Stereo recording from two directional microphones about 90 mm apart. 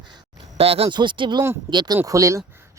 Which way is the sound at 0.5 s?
90° right.